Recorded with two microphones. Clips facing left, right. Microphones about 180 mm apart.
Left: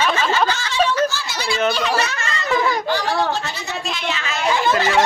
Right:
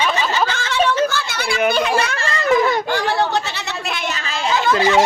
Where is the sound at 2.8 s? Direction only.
55° right (ahead or behind); by 4.5 s 30° right (ahead or behind).